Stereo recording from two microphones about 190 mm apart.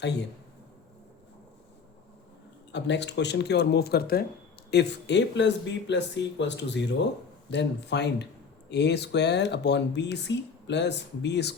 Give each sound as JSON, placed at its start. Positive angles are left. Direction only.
{"t": 0.0, "sound": "speech", "side_deg": 65}
{"t": 2.7, "sound": "speech", "side_deg": 65}